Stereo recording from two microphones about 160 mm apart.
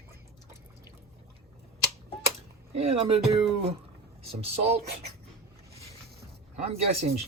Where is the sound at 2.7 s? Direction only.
40° right (ahead or behind).